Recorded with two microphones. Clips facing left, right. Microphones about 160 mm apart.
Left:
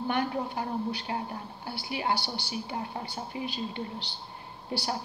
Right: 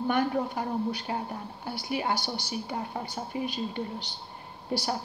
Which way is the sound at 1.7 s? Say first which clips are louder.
Right 1 dB; 45° right (ahead or behind).